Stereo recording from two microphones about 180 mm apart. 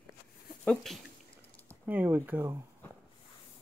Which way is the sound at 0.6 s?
5° left (ahead or behind).